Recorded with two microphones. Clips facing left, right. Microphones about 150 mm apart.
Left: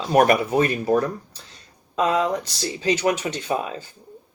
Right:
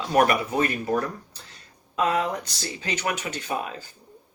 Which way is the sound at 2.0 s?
35° left (ahead or behind).